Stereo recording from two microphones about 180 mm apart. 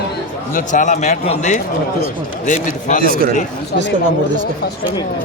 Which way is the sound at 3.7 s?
80° left.